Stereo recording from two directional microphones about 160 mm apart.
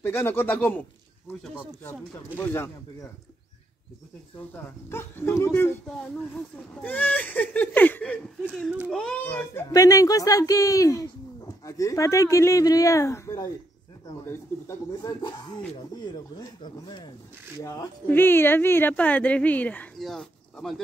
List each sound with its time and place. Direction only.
0.0 s speech: 15° left (ahead or behind)
4.4 s speech: 15° left (ahead or behind)
8.4 s speech: 5° right (ahead or behind)
8.9 s speech: 10° left (ahead or behind)